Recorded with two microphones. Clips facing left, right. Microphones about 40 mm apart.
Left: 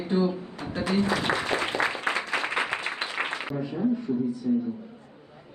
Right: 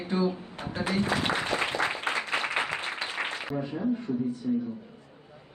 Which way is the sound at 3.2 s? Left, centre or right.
Left.